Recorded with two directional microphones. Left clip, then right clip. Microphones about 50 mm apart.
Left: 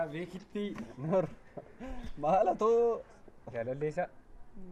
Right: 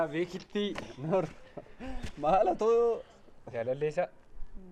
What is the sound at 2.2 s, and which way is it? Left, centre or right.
Speech, left.